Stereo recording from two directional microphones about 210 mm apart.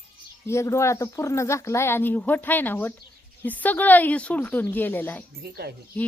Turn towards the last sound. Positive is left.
turn(degrees=5)  # may be behind; listen again after turning